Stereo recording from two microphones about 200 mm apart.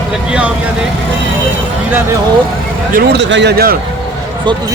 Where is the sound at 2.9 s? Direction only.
50° right (ahead or behind).